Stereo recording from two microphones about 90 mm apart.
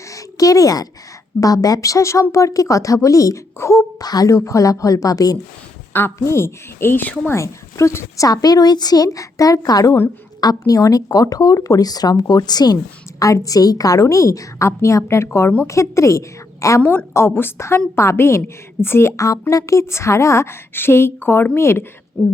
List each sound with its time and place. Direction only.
0.1 s a sound: 40° left (ahead or behind)
1.4 s speech: 40° left (ahead or behind)
5.9 s a woman's voice: 25° left (ahead or behind)
7.3 s speech: 35° left (ahead or behind)
16.8 s a woman's voice: 20° left (ahead or behind)